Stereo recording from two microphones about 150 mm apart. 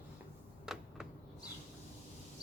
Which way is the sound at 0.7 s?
5° right (ahead or behind).